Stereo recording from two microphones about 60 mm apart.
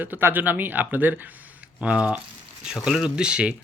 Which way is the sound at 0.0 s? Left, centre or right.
Right.